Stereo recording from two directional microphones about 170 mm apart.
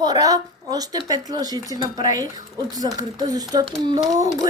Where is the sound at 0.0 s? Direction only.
20° right (ahead or behind).